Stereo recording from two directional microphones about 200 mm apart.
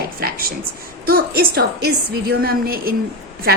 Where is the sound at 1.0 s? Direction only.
45° right (ahead or behind).